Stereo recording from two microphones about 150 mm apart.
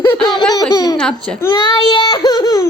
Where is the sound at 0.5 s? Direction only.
25° left (ahead or behind).